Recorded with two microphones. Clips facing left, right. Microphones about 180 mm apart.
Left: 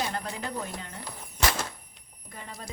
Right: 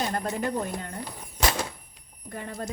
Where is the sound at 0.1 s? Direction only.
45° right (ahead or behind).